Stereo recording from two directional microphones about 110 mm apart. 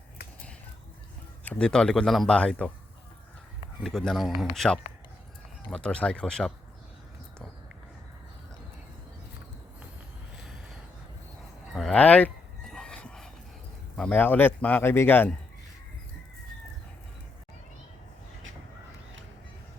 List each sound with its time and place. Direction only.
1.5 s a man's voice: 10° left (ahead or behind)
3.8 s a man's voice: 5° left (ahead or behind)
11.7 s a sound: 5° left (ahead or behind)
13.9 s a man's voice: 10° left (ahead or behind)